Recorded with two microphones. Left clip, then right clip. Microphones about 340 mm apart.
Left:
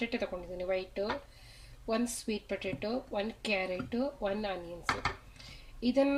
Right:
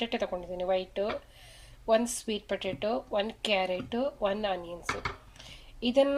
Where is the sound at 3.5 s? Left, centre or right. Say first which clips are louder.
Right 4 dB; right.